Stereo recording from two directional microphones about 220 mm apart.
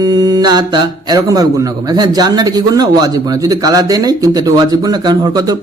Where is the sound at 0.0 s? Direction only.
20° right (ahead or behind).